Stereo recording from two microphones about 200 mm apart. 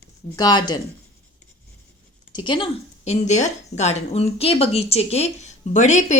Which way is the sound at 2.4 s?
25° left (ahead or behind).